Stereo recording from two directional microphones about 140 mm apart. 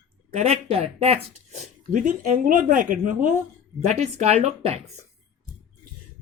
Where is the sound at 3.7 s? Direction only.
55° right (ahead or behind).